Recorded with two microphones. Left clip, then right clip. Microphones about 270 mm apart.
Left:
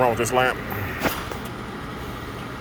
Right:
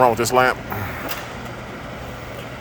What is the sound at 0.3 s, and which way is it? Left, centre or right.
Speech, right.